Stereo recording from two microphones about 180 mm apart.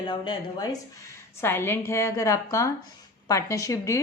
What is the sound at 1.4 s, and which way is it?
A woman's voice, 15° left (ahead or behind).